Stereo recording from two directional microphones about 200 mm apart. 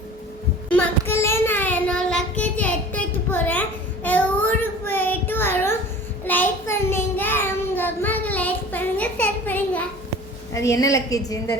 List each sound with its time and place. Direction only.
0.7 s child singing: 10° left (ahead or behind)
10.8 s a woman's voice: 15° left (ahead or behind)